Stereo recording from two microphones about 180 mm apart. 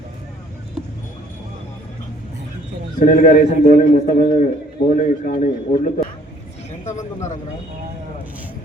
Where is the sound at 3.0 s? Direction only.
50° left (ahead or behind).